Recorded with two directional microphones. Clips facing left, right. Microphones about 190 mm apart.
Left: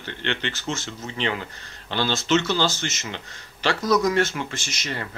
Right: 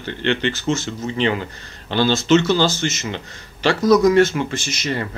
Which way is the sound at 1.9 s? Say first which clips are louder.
Right 7 dB; 40° right (ahead or behind).